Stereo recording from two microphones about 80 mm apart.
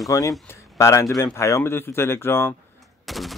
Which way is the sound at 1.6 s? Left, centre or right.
Left.